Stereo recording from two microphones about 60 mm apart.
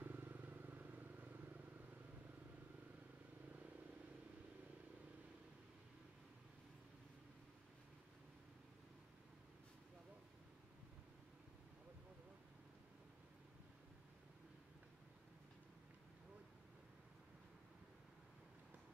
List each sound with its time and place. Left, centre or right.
0.0 s vehicle: right